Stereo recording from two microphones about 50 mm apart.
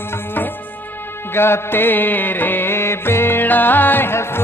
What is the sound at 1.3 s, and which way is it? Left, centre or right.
Music, left.